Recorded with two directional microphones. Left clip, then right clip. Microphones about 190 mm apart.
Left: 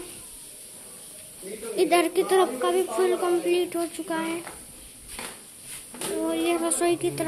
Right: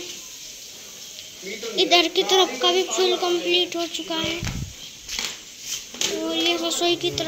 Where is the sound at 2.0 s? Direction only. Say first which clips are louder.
Right 3 dB; 35° left (ahead or behind).